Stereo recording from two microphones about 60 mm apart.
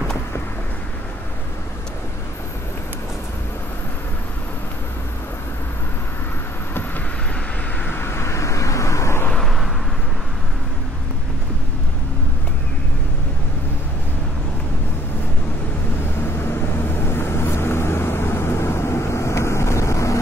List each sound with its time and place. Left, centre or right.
7.9 s vehicle: left
9.4 s vehicle: centre
16.3 s vehicle: left